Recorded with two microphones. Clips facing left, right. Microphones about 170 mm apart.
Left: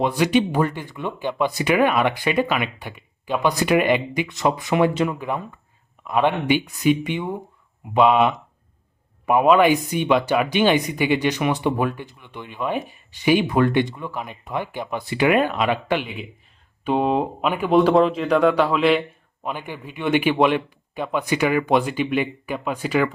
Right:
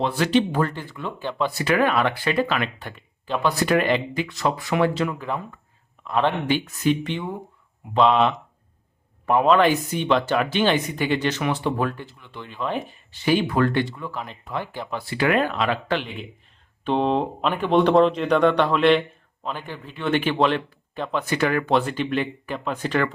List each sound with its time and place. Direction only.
0.0 s speech: 15° left (ahead or behind)